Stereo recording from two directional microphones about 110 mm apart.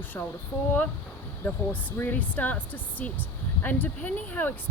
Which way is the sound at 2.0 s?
15° left (ahead or behind).